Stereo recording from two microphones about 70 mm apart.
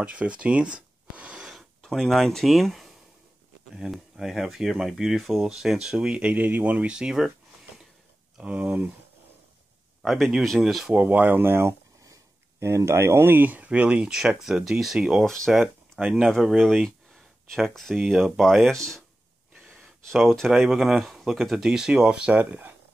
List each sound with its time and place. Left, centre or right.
0.0 s a sound: centre
1.8 s speech: centre
10.0 s speech: centre
10.9 s speech: right
12.0 s speech: right; by 15.2 s centre
15.2 s speech: centre
16.0 s speech: centre
16.3 s speech: centre
20.1 s speech: centre
22.4 s speech: right